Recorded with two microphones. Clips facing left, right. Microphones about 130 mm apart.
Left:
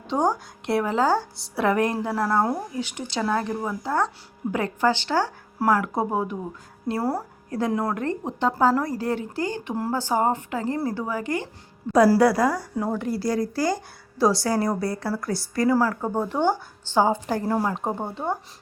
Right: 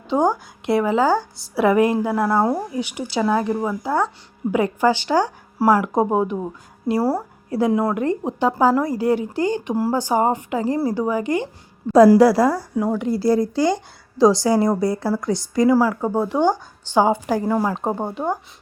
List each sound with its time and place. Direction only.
0.1 s a woman's voice: centre (ahead or behind); by 6.3 s 20° right (ahead or behind)
6.8 s a woman's voice: 10° right (ahead or behind); by 12.5 s 25° right (ahead or behind)
12.7 s a woman's voice: 10° right (ahead or behind)
13.1 s a woman's voice: 25° right (ahead or behind)
17.4 s speech: centre (ahead or behind)
17.7 s a woman's voice: 20° right (ahead or behind)